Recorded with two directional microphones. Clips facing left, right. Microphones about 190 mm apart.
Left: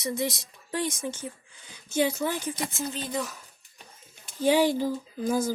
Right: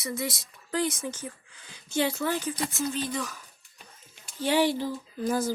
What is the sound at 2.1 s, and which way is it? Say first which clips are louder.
Speech: even; 15° left (ahead or behind).